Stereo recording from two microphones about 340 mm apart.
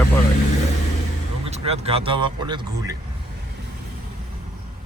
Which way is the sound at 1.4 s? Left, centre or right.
Centre.